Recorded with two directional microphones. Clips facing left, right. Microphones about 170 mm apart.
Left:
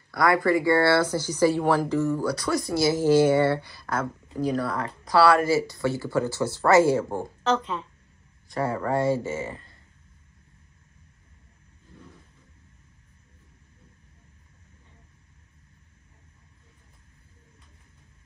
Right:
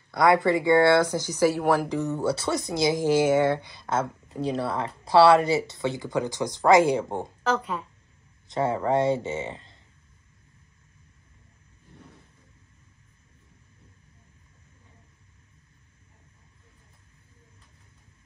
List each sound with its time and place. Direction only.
0.1 s speech: 20° right (ahead or behind)
7.4 s speech: 10° right (ahead or behind)
8.5 s speech: 20° right (ahead or behind)